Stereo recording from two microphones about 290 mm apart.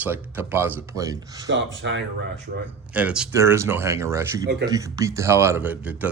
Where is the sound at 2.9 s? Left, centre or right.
Centre.